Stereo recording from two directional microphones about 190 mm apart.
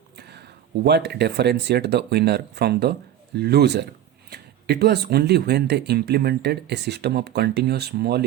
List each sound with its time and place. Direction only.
0.2 s speech: 60° right (ahead or behind)